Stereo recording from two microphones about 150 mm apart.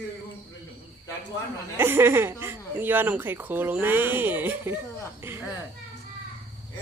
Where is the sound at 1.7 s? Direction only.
15° right (ahead or behind).